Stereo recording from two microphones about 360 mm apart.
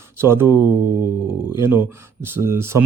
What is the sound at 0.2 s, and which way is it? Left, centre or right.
Speech, centre.